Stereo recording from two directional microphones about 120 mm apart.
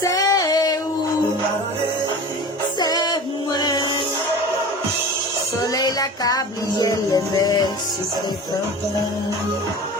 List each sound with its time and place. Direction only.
0.0 s female singing: 30° left (ahead or behind)
2.7 s music: 35° left (ahead or behind)
5.7 s music: 30° left (ahead or behind)